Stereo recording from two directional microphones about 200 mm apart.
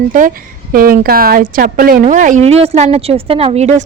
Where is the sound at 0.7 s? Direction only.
45° right (ahead or behind).